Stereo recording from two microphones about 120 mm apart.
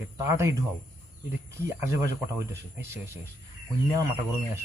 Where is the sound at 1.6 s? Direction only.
20° right (ahead or behind).